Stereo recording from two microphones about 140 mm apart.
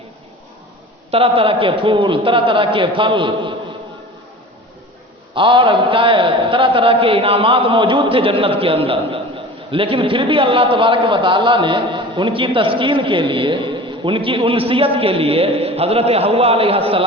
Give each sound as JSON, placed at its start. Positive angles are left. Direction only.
{"t": 1.1, "sound": "a man's voice", "side_deg": -40}
{"t": 5.3, "sound": "a man's voice", "side_deg": -35}